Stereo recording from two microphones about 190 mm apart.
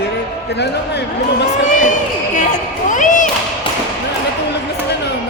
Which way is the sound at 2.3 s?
40° left (ahead or behind).